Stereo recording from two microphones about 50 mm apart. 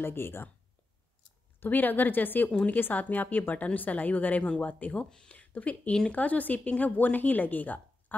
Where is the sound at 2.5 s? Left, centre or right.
Left.